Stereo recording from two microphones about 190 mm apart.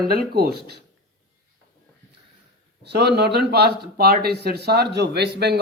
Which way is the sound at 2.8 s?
60° right (ahead or behind).